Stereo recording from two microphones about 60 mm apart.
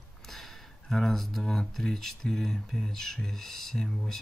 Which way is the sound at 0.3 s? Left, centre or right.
Centre.